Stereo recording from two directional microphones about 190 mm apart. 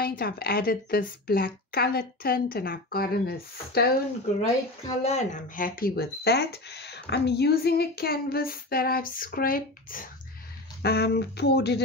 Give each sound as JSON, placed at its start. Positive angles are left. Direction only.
{"t": 0.0, "sound": "speech", "side_deg": 55}
{"t": 5.0, "sound": "speech", "side_deg": 40}